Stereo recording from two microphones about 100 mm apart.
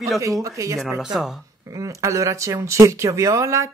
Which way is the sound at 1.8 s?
30° right (ahead or behind).